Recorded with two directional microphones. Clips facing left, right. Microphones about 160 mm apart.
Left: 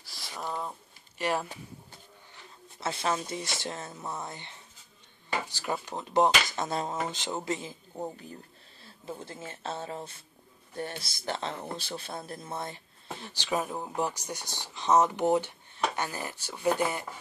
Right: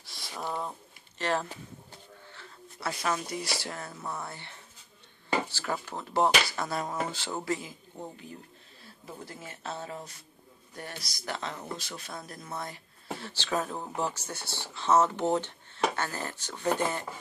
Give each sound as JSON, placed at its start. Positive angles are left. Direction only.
{"t": 0.0, "sound": "a sound", "side_deg": 0}
{"t": 1.1, "sound": "speech", "side_deg": 10}
{"t": 9.0, "sound": "speech", "side_deg": 25}
{"t": 13.3, "sound": "speech", "side_deg": 15}